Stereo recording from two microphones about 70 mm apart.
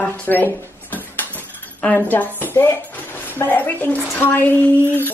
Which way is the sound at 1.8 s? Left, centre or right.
Left.